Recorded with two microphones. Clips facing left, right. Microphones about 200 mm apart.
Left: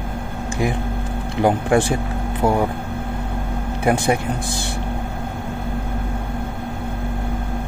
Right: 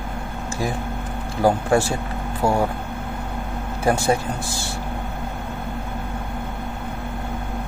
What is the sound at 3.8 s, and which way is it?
Speech, 15° left (ahead or behind).